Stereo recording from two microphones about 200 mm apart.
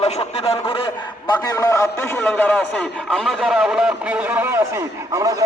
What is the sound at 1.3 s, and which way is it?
A man's voice, 15° left (ahead or behind).